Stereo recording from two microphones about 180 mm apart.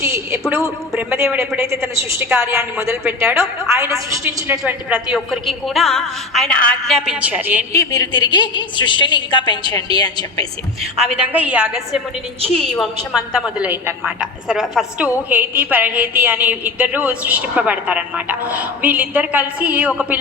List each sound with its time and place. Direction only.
0.0 s a sound: 15° right (ahead or behind)
0.5 s a woman's voice: 15° right (ahead or behind)
4.6 s a woman's voice: 5° right (ahead or behind)
7.7 s a woman's voice: 20° left (ahead or behind)
10.9 s a woman's voice: 5° right (ahead or behind)